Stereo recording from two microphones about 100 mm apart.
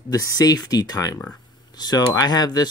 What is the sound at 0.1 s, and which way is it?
Speech, 35° left (ahead or behind).